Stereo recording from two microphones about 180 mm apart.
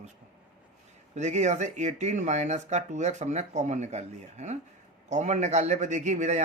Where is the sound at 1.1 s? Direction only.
40° right (ahead or behind).